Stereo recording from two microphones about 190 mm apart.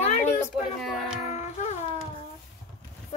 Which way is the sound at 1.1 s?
35° left (ahead or behind).